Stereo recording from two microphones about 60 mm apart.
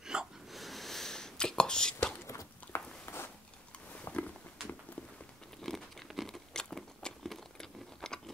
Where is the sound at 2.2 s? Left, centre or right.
Left.